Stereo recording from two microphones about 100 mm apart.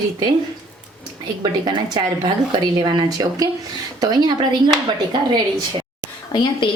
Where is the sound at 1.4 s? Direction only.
45° right (ahead or behind).